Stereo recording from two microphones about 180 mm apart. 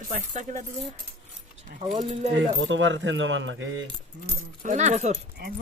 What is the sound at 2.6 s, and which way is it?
Speech, 90° right.